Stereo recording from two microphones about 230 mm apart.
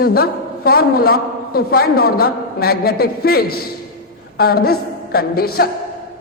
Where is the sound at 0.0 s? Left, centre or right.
Left.